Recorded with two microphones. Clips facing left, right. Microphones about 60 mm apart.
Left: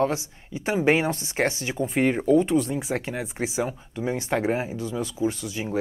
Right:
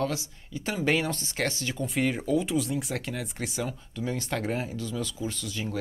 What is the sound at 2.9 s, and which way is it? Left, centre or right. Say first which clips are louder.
Speech: left 5 dB; centre.